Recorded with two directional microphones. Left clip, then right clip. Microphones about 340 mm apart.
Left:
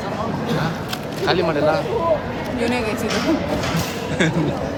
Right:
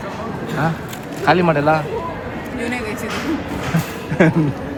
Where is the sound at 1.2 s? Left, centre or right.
Centre.